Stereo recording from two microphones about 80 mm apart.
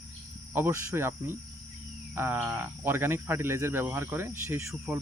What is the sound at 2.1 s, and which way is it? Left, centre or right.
Speech, right.